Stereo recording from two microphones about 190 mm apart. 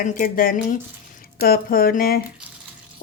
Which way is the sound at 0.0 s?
45° left (ahead or behind).